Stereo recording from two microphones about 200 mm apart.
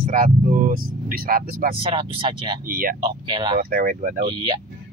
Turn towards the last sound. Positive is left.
turn(degrees=-25)  # may be behind; listen again after turning